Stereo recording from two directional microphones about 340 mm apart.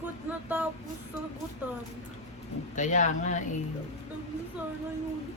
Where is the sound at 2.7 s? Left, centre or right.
Left.